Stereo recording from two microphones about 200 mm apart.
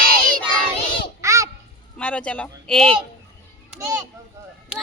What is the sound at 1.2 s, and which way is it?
Crow, 15° right (ahead or behind).